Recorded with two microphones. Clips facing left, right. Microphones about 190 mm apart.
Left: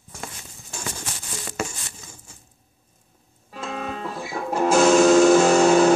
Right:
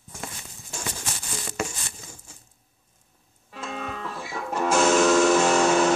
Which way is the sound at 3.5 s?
30° left (ahead or behind).